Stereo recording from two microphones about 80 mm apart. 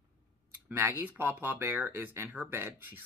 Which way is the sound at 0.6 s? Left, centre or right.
Right.